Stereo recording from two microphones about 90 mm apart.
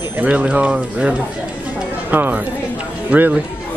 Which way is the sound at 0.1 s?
15° right (ahead or behind).